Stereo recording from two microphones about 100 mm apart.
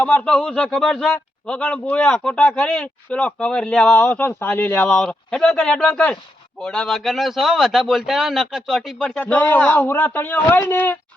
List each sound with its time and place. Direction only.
0.0 s a man's voice: 15° left (ahead or behind); by 8.8 s centre (ahead or behind)
9.0 s a man's voice: 10° left (ahead or behind)